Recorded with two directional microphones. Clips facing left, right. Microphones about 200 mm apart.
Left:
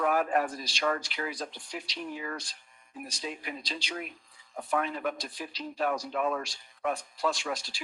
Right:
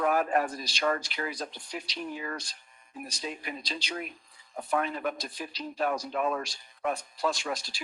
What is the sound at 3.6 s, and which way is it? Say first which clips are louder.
A man's voice: right 1 dB; 40° right (ahead or behind).